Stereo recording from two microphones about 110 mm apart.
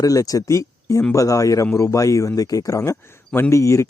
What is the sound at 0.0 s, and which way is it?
Speech, 35° left (ahead or behind).